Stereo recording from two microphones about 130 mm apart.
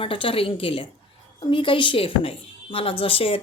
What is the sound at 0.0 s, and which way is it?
A woman's voice, 45° left (ahead or behind).